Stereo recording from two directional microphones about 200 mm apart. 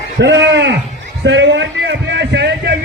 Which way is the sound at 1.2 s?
65° right (ahead or behind).